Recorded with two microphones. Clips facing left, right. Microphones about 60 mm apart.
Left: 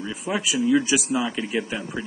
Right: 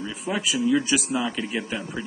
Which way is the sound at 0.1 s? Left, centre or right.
Centre.